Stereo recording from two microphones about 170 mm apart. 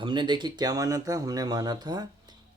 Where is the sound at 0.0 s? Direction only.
25° right (ahead or behind).